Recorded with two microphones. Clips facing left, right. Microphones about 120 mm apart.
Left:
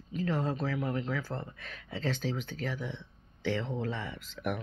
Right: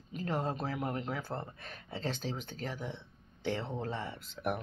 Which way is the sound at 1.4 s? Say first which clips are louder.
Left 1 dB; 40° right (ahead or behind).